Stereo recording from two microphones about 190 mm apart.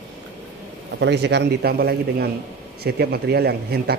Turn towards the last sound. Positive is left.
turn(degrees=-55)  # may be behind; listen again after turning